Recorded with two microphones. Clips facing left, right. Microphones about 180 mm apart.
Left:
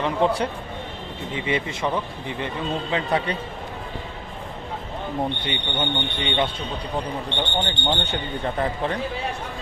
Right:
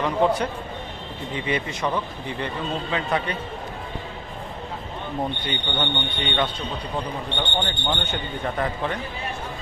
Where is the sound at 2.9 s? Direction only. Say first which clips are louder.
Left 2 dB; 30° left (ahead or behind).